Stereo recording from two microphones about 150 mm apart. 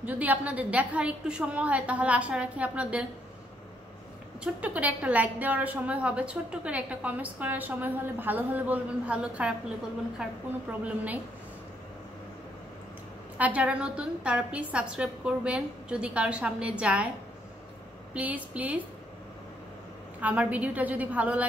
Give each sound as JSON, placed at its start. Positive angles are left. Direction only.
{"t": 0.0, "sound": "a woman's voice", "side_deg": -10}
{"t": 4.4, "sound": "a woman's voice", "side_deg": -10}
{"t": 13.4, "sound": "a woman's voice", "side_deg": -10}
{"t": 18.1, "sound": "a woman's voice", "side_deg": -10}
{"t": 20.2, "sound": "a woman's voice", "side_deg": -10}